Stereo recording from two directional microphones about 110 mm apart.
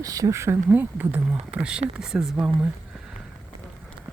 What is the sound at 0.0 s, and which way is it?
Speech, 30° right (ahead or behind).